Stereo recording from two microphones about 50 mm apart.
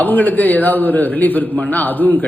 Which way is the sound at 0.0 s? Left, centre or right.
Left.